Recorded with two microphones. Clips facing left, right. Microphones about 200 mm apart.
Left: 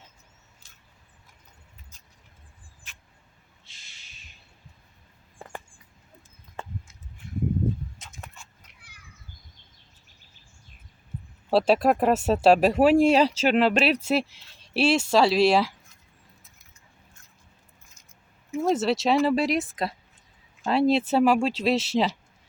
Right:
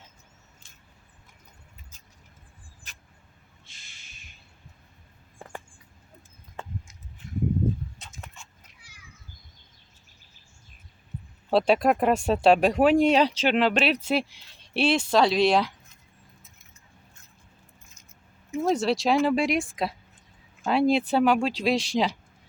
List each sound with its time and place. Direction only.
2.8 s a sound: 40° right (ahead or behind)
11.5 s speech: centre (ahead or behind)
18.5 s speech: centre (ahead or behind)